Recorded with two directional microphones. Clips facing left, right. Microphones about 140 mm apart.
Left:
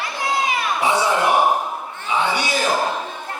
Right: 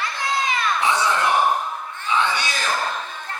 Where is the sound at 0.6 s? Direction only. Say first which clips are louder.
Left 2 dB; 10° left (ahead or behind).